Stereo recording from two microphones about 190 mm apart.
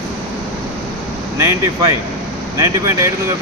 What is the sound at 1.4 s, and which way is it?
Speech, 15° right (ahead or behind).